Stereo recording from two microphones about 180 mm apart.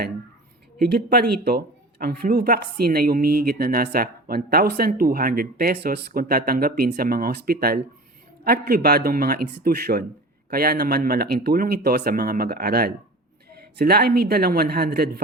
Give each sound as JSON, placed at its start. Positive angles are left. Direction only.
{"t": 0.8, "sound": "speech", "side_deg": -60}